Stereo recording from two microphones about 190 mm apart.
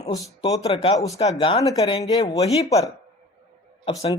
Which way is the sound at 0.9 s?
15° left (ahead or behind).